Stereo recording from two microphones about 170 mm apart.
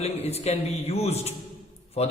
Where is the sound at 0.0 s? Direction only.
40° left (ahead or behind).